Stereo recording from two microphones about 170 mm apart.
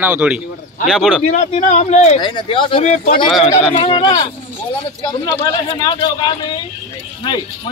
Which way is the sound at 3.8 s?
30° left (ahead or behind).